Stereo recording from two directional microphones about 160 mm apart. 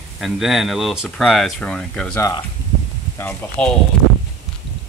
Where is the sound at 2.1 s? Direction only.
20° left (ahead or behind).